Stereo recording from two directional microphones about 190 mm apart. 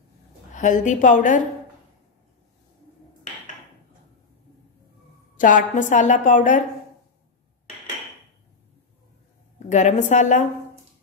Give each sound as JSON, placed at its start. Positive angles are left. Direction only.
{"t": 0.5, "sound": "a woman's voice", "side_deg": 40}
{"t": 5.4, "sound": "a woman's voice", "side_deg": 40}
{"t": 9.7, "sound": "a woman's voice", "side_deg": 40}